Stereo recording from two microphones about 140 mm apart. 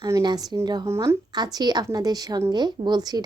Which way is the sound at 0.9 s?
20° right (ahead or behind).